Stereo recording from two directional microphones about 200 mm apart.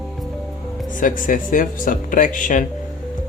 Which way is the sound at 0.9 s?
40° left (ahead or behind).